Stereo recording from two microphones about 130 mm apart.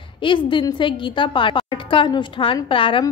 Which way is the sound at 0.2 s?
40° left (ahead or behind).